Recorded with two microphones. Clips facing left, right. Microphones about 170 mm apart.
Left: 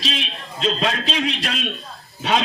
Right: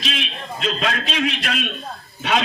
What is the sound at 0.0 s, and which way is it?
A man's voice, 35° left (ahead or behind).